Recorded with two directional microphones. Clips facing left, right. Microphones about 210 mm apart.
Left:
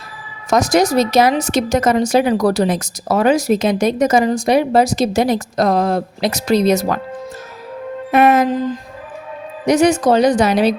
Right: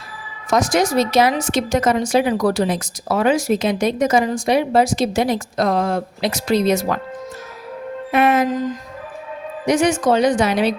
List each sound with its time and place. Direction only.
0.5 s speech: 40° left (ahead or behind)
8.1 s speech: 40° left (ahead or behind)